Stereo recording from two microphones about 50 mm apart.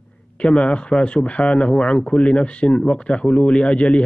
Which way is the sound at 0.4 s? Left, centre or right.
Left.